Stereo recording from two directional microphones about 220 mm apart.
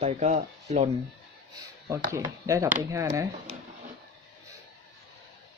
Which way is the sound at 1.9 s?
15° right (ahead or behind).